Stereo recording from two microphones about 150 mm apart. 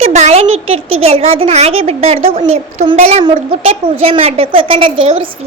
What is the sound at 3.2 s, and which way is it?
A woman's voice, 40° right (ahead or behind).